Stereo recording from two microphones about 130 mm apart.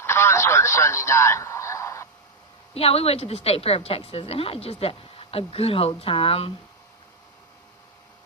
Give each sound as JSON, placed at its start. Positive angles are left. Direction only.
{"t": 0.0, "sound": "radio", "side_deg": 20}
{"t": 2.7, "sound": "a woman's voice", "side_deg": 50}